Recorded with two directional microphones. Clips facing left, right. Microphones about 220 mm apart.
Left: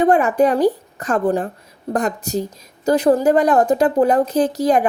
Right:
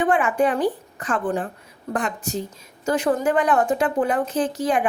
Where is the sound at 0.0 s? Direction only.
40° left (ahead or behind).